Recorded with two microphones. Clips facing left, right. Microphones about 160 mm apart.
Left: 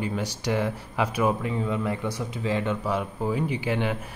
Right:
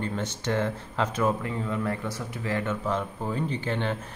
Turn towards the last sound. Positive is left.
turn(degrees=10)  # may be behind; listen again after turning